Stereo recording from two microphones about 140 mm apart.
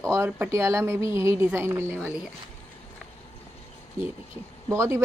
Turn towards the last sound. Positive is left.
turn(degrees=-20)  # may be behind; listen again after turning